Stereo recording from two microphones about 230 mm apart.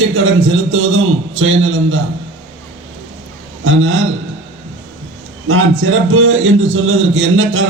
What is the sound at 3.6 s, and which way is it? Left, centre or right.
Speech, right.